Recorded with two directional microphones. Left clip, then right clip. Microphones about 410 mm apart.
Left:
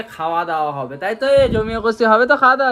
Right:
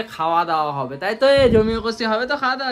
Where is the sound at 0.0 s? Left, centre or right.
Centre.